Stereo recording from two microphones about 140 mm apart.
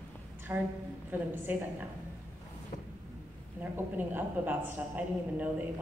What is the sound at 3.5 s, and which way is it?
A woman's voice, 15° right (ahead or behind).